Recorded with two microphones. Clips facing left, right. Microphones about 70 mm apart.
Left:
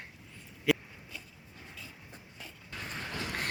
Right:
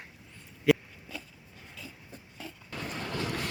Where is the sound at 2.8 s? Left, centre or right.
Right.